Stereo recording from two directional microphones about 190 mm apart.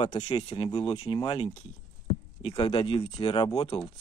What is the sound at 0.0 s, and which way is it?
Speech, 30° left (ahead or behind).